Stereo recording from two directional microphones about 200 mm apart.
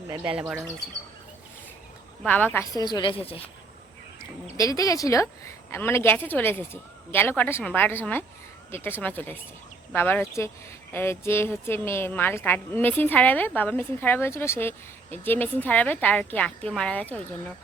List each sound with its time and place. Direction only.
0.3 s speech: 5° right (ahead or behind)
2.2 s a woman's voice: 10° left (ahead or behind)
2.7 s a woman's voice: 20° left (ahead or behind)
4.5 s a woman's voice: 15° left (ahead or behind)